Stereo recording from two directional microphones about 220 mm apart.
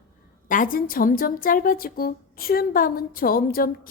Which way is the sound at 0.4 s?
40° left (ahead or behind).